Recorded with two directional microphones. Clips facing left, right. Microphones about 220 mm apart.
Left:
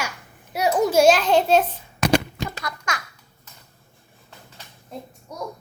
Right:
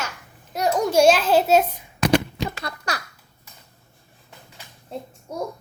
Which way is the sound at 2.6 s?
35° right (ahead or behind).